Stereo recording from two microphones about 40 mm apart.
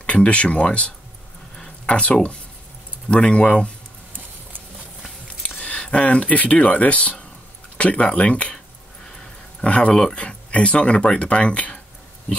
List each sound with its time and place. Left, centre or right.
0.0 s speech: left
5.6 s speech: left
9.6 s speech: left